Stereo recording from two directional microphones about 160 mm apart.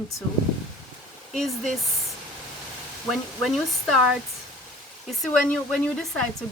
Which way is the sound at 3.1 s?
Centre (ahead or behind).